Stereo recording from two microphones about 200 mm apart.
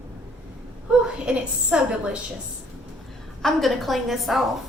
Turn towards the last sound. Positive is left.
turn(degrees=0)  # may be behind; listen again after turning